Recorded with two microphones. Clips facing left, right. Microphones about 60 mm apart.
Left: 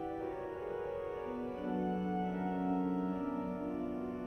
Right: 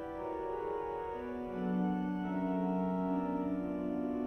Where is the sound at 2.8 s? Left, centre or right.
Right.